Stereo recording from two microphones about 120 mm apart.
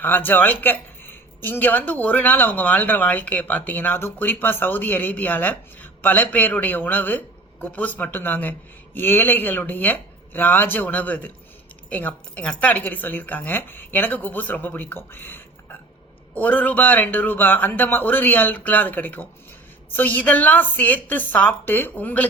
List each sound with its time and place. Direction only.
0.0 s speech: 15° left (ahead or behind)